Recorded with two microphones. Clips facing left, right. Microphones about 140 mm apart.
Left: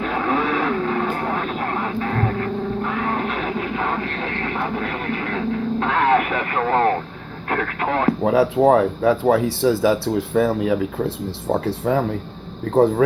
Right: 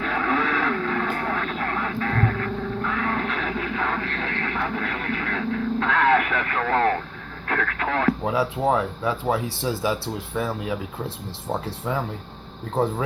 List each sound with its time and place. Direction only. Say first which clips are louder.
0.0 s vehicle: left 3 dB; 25° left (ahead or behind)
7.5 s speech: left 3 dB; 25° left (ahead or behind)
8.3 s speech: left 7 dB; 60° left (ahead or behind)